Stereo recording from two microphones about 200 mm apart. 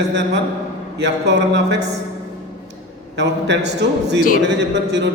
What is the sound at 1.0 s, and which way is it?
Speech, 60° right (ahead or behind).